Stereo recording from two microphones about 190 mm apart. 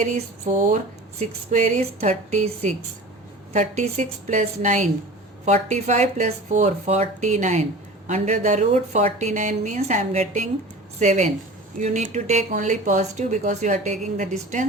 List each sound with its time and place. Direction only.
0.0 s speech: 40° right (ahead or behind)